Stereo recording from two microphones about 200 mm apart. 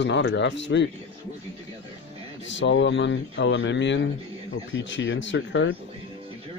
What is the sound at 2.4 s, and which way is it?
Speech, 65° left (ahead or behind).